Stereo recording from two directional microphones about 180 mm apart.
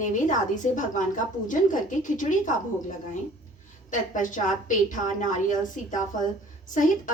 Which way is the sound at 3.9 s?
45° left (ahead or behind).